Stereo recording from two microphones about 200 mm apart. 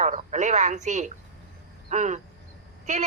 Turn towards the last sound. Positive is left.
turn(degrees=-35)  # may be behind; listen again after turning